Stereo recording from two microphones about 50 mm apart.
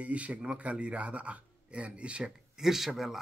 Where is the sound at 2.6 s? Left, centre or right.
Centre.